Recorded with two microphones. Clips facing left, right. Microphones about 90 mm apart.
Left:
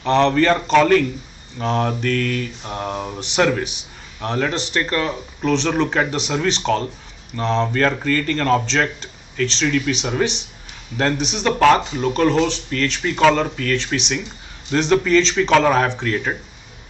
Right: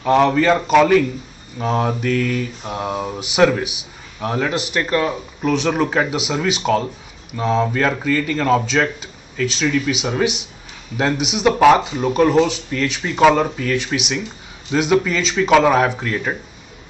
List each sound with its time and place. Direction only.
0.0 s mantra: 10° right (ahead or behind)